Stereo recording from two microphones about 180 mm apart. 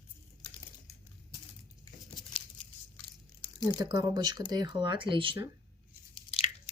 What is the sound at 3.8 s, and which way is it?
Speech, 20° right (ahead or behind).